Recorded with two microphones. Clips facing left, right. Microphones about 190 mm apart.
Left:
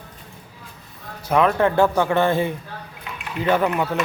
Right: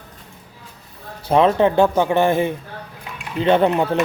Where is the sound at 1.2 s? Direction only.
30° right (ahead or behind).